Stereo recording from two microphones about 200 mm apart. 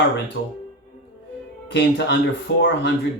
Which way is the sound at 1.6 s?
60° left (ahead or behind).